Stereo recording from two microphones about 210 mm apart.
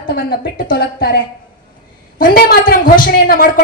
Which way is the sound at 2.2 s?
45° left (ahead or behind).